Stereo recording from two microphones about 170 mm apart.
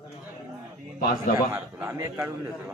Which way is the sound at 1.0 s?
60° left (ahead or behind).